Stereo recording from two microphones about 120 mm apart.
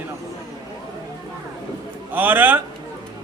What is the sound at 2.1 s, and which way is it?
Speech, 15° right (ahead or behind).